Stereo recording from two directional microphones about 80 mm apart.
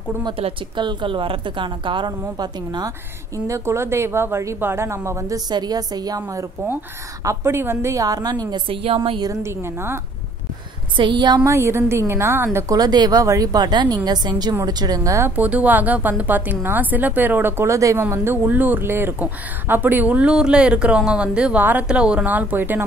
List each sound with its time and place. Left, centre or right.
0.7 s a woman's voice: right
3.4 s a woman's voice: right
5.5 s a woman's voice: right
7.2 s a woman's voice: right
9.4 s a woman's voice: right
11.0 s speech: right
11.4 s a woman's voice: right
12.7 s a woman's voice: right
13.2 s a woman's voice: right
15.0 s a woman's voice: right
15.3 s speech: centre; by 18.0 s right
18.1 s speech: right